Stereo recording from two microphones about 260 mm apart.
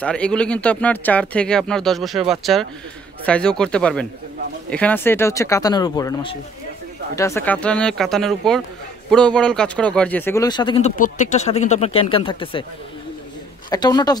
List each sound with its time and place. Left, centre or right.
0.0 s speech: centre
13.7 s speech: centre